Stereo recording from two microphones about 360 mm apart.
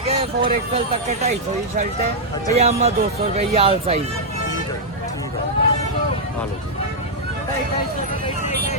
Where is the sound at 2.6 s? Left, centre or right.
Centre.